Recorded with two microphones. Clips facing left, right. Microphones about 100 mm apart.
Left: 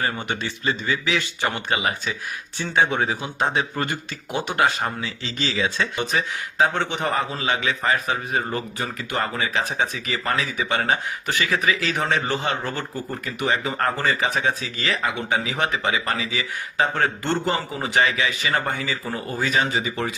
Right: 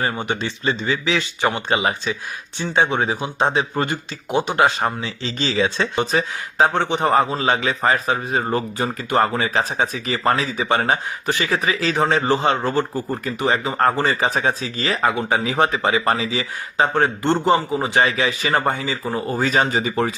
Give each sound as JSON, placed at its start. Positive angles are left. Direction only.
{"t": 0.0, "sound": "speech", "side_deg": -20}
{"t": 19.4, "sound": "speech", "side_deg": -40}